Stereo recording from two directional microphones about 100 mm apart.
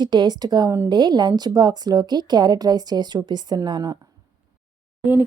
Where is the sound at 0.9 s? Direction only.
45° right (ahead or behind).